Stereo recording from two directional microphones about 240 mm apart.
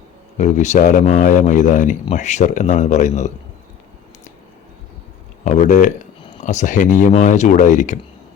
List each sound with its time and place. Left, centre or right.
0.3 s speech: left
5.5 s speech: left